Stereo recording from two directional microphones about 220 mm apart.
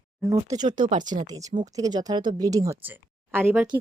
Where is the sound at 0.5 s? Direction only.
20° right (ahead or behind).